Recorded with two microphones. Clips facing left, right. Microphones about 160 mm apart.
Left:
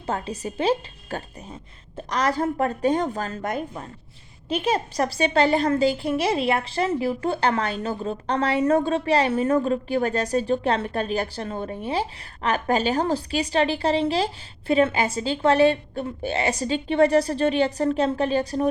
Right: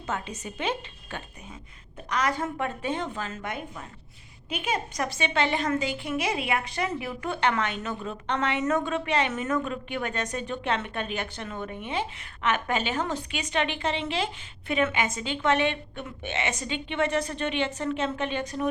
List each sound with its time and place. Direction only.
0.0 s a woman's voice: 35° left (ahead or behind)